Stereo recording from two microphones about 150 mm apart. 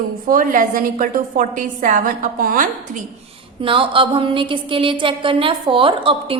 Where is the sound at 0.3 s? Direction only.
65° right (ahead or behind).